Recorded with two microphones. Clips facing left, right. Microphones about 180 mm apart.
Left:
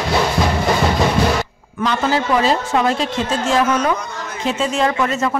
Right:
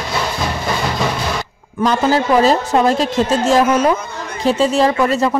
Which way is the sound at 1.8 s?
40° right (ahead or behind).